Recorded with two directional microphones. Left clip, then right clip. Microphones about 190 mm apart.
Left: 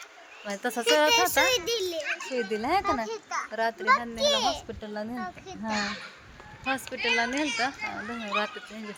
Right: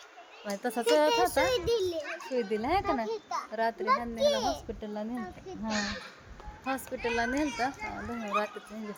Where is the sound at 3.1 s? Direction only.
Centre (ahead or behind).